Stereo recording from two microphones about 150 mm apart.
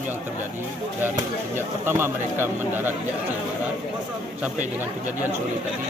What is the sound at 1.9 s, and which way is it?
A man's voice, 15° right (ahead or behind).